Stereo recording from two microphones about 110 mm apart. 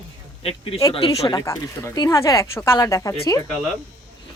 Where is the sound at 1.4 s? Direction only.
30° left (ahead or behind).